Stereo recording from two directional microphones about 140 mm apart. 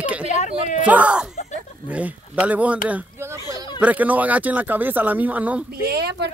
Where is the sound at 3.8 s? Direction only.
10° right (ahead or behind).